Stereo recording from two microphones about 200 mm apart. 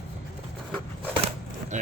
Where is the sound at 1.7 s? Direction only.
35° right (ahead or behind).